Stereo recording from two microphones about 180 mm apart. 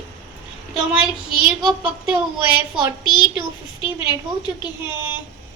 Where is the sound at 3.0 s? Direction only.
25° left (ahead or behind).